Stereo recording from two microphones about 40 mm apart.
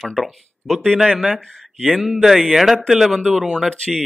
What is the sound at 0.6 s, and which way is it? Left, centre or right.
Speech, centre.